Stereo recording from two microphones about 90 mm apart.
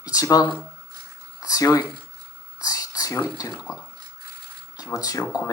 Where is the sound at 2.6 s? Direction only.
40° left (ahead or behind).